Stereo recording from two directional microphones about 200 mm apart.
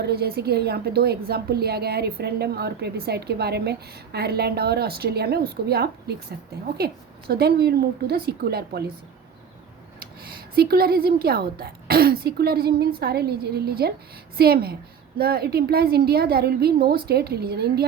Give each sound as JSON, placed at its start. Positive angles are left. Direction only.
{"t": 0.0, "sound": "a woman's voice", "side_deg": -55}
{"t": 10.5, "sound": "a woman's voice", "side_deg": -50}